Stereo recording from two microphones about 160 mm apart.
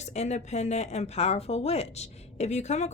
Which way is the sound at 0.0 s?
45° left (ahead or behind).